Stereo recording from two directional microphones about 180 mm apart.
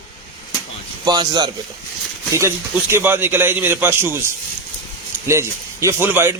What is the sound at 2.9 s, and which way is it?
A man's voice, 10° right (ahead or behind).